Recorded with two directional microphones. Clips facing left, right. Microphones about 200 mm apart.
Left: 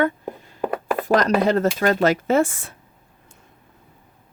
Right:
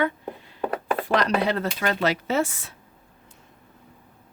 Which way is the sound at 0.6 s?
10° left (ahead or behind).